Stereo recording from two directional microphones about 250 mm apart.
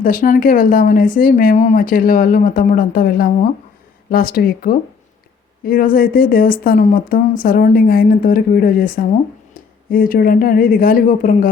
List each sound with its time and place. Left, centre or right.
0.0 s speech: left